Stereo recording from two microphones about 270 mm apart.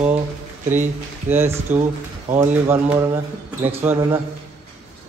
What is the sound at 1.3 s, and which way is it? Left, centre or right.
Mantra, centre.